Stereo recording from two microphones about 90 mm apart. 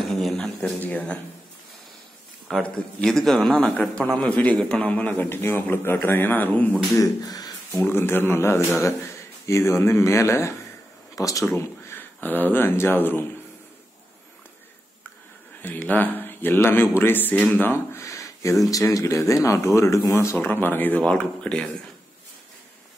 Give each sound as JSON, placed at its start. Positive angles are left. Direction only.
{"t": 0.0, "sound": "a sound", "side_deg": 0}
{"t": 0.7, "sound": "speech", "side_deg": 15}
{"t": 2.6, "sound": "a man's voice", "side_deg": 5}
{"t": 7.0, "sound": "speech", "side_deg": 45}
{"t": 7.7, "sound": "a man's voice", "side_deg": 25}
{"t": 11.4, "sound": "speech", "side_deg": 25}
{"t": 15.6, "sound": "a man's voice", "side_deg": 20}
{"t": 18.0, "sound": "a sound", "side_deg": 35}
{"t": 18.9, "sound": "speech", "side_deg": 35}
{"t": 20.3, "sound": "a man's voice", "side_deg": 20}